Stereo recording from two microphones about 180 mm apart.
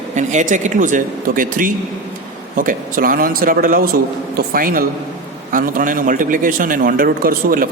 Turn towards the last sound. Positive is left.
turn(degrees=-50)  # may be behind; listen again after turning